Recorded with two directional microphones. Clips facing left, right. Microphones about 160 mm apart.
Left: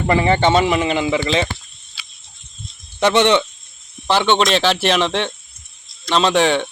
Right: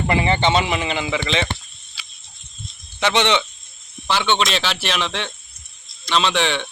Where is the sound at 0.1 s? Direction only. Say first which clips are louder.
Left 4 dB; 45° left (ahead or behind).